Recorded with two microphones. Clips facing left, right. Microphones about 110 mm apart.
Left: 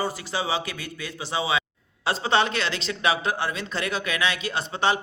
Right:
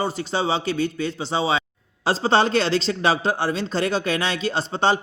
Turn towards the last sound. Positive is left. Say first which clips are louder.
# right 3 dB
turn(degrees=-30)  # may be behind; listen again after turning